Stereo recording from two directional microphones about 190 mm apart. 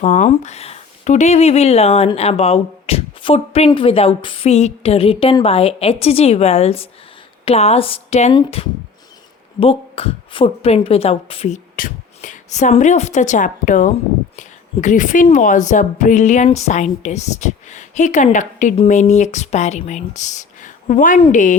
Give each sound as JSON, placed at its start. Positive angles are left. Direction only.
{"t": 0.0, "sound": "a woman's voice", "side_deg": 35}